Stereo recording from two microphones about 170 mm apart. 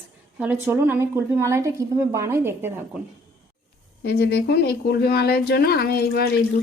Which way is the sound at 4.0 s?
70° left (ahead or behind).